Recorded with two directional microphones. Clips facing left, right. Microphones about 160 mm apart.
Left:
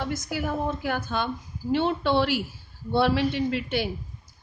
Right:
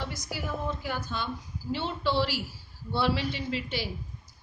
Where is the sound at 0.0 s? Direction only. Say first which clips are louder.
Left 7 dB; 50° left (ahead or behind).